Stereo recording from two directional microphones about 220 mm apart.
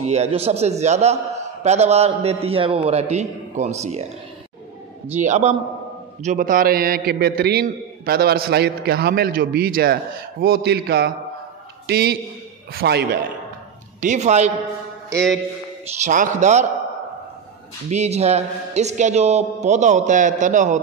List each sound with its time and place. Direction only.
0.1 s a man's voice: 30° right (ahead or behind)
5.2 s a man's voice: 30° right (ahead or behind); by 13.2 s 45° right (ahead or behind)
14.0 s a man's voice: 30° right (ahead or behind)
16.0 s a man's voice: 35° right (ahead or behind)
17.8 s a man's voice: 30° right (ahead or behind)